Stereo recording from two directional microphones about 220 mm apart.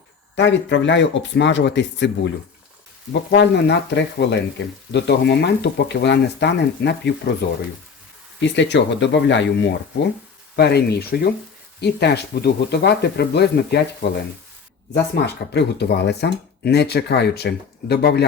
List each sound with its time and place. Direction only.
0.3 s speech: 55° left (ahead or behind)
8.4 s speech: 55° left (ahead or behind)
10.5 s speech: 50° left (ahead or behind)